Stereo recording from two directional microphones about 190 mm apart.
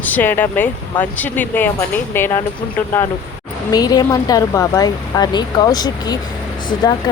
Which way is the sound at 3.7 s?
20° left (ahead or behind).